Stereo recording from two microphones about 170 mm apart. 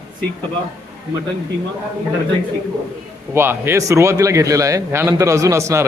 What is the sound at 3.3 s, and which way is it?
A man's voice, 15° right (ahead or behind).